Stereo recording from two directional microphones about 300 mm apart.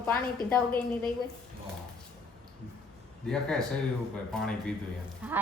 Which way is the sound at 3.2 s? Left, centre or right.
Centre.